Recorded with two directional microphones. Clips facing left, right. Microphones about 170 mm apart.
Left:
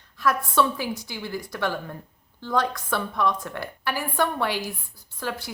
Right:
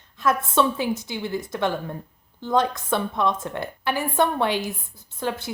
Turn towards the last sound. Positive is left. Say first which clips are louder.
# right 4 dB
turn(degrees=-20)  # may be behind; listen again after turning